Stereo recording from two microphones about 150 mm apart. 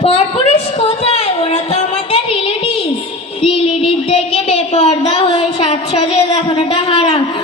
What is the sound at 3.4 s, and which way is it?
A woman's voice, 40° left (ahead or behind).